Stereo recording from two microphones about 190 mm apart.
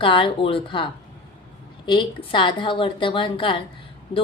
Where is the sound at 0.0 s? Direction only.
25° left (ahead or behind).